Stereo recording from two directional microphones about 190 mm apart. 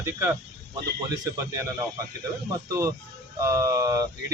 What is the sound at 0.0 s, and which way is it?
Speech, 15° right (ahead or behind).